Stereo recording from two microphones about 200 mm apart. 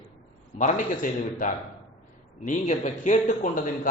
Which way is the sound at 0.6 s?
40° left (ahead or behind).